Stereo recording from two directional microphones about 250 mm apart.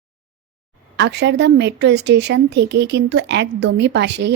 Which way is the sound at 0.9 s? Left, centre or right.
Right.